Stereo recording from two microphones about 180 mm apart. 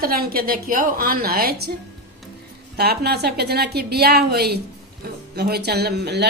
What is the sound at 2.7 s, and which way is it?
A woman's voice, 60° right (ahead or behind).